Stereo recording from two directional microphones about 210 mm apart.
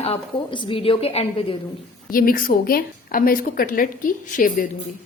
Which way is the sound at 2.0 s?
40° left (ahead or behind).